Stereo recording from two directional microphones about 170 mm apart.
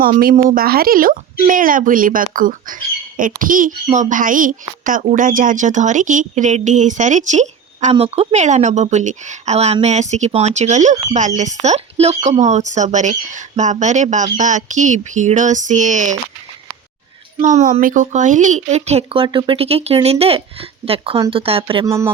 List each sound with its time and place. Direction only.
0.0 s speech: 60° right (ahead or behind)
17.4 s speech: 45° right (ahead or behind)
21.8 s speech: 15° right (ahead or behind)